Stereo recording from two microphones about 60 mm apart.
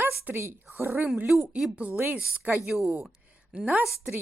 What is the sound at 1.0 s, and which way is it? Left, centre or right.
Speech, centre.